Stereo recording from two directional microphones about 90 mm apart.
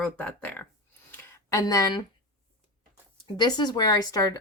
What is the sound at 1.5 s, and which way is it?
Speech, 40° left (ahead or behind).